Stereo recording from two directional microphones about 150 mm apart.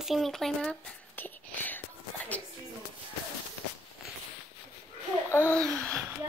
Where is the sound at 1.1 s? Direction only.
10° left (ahead or behind).